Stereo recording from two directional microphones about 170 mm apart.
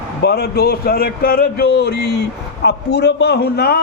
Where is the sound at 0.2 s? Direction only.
70° left (ahead or behind).